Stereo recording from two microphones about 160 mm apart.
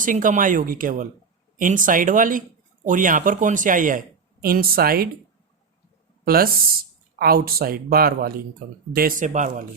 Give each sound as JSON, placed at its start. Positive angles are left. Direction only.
{"t": 0.0, "sound": "speech", "side_deg": -55}
{"t": 6.2, "sound": "speech", "side_deg": -70}